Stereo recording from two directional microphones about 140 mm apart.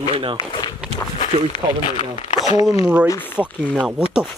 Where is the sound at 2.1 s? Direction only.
55° left (ahead or behind).